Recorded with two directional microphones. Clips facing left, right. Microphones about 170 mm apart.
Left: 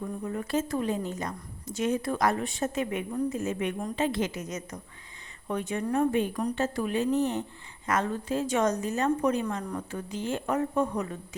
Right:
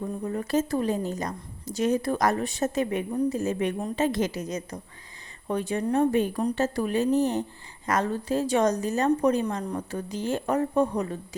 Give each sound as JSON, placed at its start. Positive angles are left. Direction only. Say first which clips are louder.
{"t": 0.3, "sound": "speech", "louder": "right 4 dB", "side_deg": -40}